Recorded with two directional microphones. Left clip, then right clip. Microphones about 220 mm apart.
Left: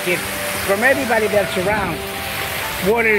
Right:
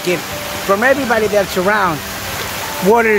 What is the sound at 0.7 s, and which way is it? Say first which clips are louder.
Speech: right 5 dB; 5° right (ahead or behind).